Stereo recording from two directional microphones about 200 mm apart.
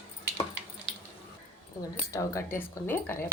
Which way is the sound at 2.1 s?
15° left (ahead or behind).